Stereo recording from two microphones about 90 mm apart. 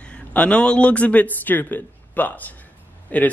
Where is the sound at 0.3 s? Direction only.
10° left (ahead or behind).